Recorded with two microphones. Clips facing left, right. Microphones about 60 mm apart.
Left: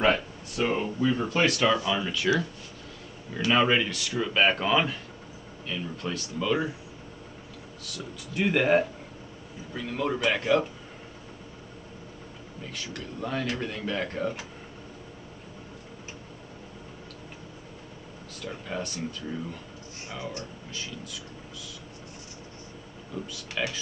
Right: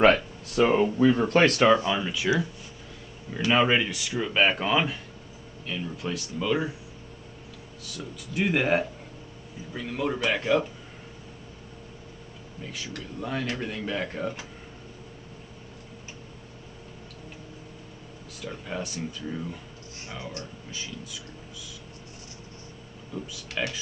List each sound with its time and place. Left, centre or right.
0.6 s speech: right
1.6 s speech: right
2.0 s speech: centre
7.9 s speech: centre
12.7 s speech: centre
18.4 s speech: centre
23.6 s speech: centre